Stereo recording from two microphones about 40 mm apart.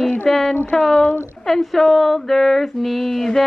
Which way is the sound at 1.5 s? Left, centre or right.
Centre.